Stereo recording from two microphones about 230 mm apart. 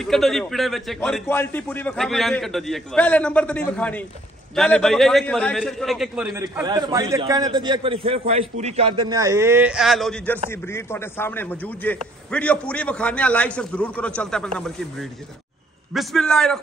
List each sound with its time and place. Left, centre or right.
0.0 s a man's voice: centre
6.3 s a man's voice: centre